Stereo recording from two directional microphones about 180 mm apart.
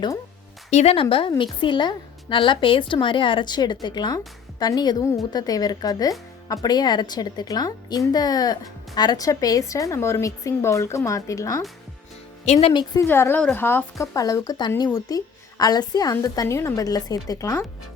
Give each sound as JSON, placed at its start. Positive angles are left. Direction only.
{"t": 0.7, "sound": "a woman's voice", "side_deg": 35}
{"t": 12.5, "sound": "a woman's voice", "side_deg": 35}
{"t": 12.9, "sound": "a woman's voice", "side_deg": 15}